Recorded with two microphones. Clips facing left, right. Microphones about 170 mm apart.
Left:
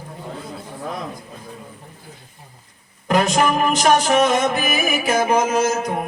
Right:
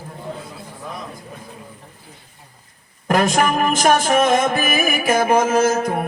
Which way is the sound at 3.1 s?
50° right (ahead or behind).